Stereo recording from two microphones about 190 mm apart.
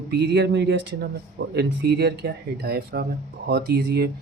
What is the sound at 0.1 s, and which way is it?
Speech, 65° right (ahead or behind).